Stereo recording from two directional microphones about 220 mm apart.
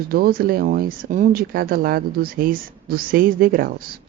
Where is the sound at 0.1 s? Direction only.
40° right (ahead or behind).